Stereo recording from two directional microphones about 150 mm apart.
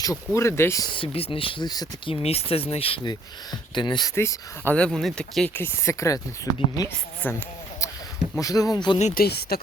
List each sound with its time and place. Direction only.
0.3 s speech: 15° left (ahead or behind)
0.9 s speech: 35° left (ahead or behind)
2.2 s speech: 40° left (ahead or behind)
4.1 s speech: 15° left (ahead or behind)
5.6 s speech: 20° left (ahead or behind)
8.4 s speech: 25° left (ahead or behind)
9.1 s speech: 90° left